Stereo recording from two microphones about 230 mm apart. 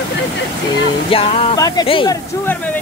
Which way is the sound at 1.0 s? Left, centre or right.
Left.